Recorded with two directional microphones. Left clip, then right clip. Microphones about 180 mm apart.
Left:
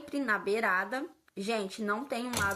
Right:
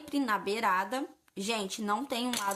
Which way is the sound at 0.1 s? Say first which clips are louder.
Left 1 dB; 55° right (ahead or behind).